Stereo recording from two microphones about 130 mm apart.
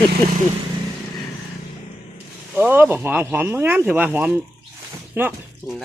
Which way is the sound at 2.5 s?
15° right (ahead or behind).